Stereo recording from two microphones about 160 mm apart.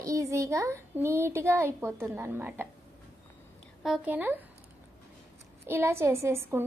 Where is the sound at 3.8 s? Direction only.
5° right (ahead or behind).